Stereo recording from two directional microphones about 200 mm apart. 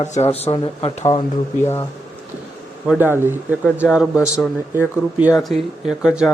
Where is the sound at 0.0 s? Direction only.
35° left (ahead or behind).